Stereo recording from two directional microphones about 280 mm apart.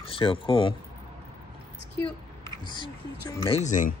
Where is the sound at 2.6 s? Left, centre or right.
Centre.